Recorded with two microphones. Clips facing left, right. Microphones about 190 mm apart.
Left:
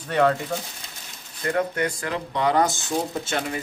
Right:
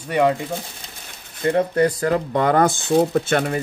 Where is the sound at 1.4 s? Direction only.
30° right (ahead or behind); by 3.6 s 60° right (ahead or behind).